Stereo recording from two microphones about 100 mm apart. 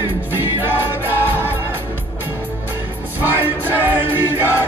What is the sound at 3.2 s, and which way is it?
Music, 20° right (ahead or behind).